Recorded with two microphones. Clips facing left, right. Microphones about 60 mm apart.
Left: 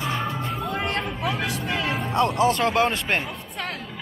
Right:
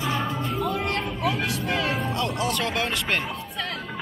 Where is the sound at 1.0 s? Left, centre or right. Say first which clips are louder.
Even; left.